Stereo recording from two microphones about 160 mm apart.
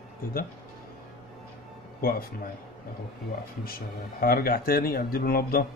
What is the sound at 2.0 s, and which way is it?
Speech, 70° left (ahead or behind).